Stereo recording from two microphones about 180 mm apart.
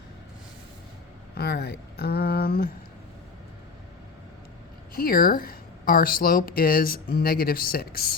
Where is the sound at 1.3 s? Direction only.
65° left (ahead or behind).